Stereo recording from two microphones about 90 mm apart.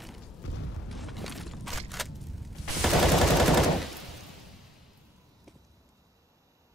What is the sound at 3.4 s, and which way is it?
Machine gun, centre (ahead or behind).